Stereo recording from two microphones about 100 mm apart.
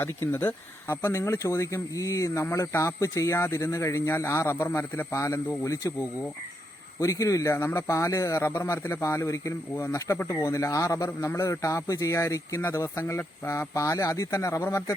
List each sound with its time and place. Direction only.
0.0 s speech: 25° left (ahead or behind)